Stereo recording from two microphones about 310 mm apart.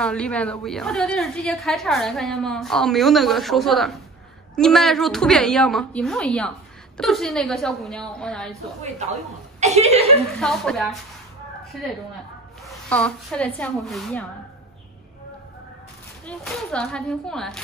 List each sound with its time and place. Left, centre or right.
0.0 s a woman's voice: centre
9.6 s speech: right
10.4 s a woman's voice: centre
16.3 s a woman's voice: centre